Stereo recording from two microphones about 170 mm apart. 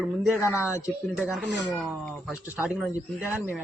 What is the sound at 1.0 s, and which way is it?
Speech, 5° right (ahead or behind).